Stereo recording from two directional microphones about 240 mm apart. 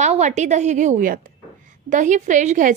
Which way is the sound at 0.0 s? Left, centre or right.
Right.